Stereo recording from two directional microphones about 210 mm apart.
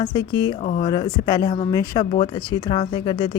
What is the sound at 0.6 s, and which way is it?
Speech, 35° left (ahead or behind).